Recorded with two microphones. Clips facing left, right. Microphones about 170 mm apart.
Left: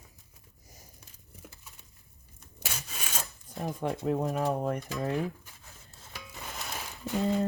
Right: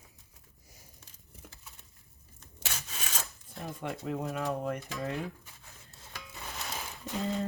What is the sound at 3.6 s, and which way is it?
Speech, 35° left (ahead or behind).